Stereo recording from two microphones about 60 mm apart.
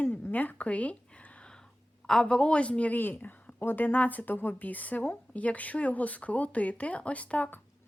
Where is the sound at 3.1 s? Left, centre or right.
Left.